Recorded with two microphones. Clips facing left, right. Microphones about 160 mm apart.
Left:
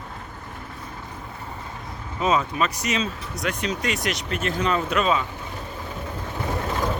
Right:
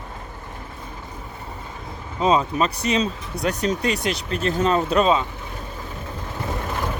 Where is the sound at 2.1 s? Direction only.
30° right (ahead or behind).